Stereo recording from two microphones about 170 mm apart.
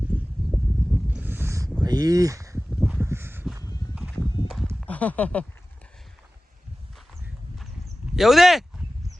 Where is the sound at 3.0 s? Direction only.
15° right (ahead or behind).